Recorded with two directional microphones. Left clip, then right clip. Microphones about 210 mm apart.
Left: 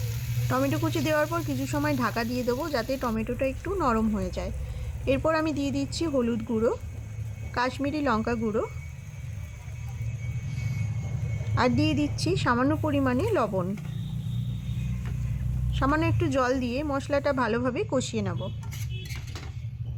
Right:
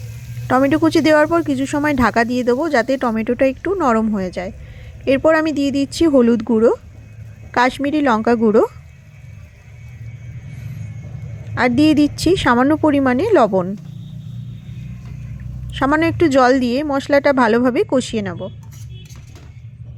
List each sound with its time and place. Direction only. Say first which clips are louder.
0.4 s a woman's voice: right 13 dB; 30° right (ahead or behind)
11.5 s speech: right 11 dB; 25° right (ahead or behind)
15.7 s speech: right 10 dB; 30° right (ahead or behind)